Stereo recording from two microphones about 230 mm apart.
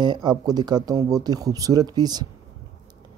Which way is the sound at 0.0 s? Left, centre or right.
Centre.